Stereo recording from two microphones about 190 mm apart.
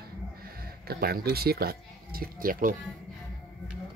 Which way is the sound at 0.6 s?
55° right (ahead or behind).